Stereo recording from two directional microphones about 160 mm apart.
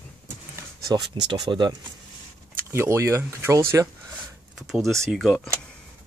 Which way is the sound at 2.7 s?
15° right (ahead or behind).